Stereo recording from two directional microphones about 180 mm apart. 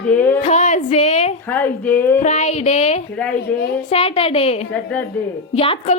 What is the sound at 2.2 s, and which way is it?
A woman's voice, 40° left (ahead or behind).